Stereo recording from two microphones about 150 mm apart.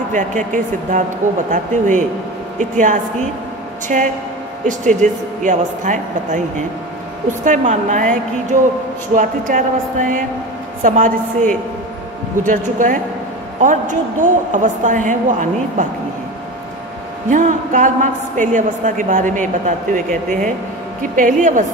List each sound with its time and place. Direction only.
0.1 s a woman's voice: 55° right (ahead or behind)
17.3 s a woman's voice: 55° right (ahead or behind)